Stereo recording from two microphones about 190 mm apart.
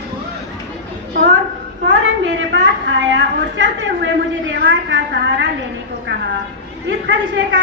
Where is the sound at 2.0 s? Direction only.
90° right; by 5.4 s 70° right (ahead or behind).